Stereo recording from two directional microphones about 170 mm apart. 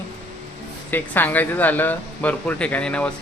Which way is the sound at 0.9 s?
10° left (ahead or behind).